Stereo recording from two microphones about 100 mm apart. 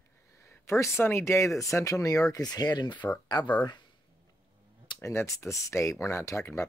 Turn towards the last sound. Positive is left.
turn(degrees=30)  # may be behind; listen again after turning